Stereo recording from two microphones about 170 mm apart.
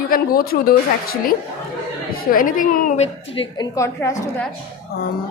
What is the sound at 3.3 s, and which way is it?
Speech, 20° left (ahead or behind).